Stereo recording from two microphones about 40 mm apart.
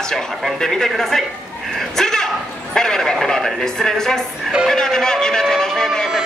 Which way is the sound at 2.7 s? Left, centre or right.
Centre.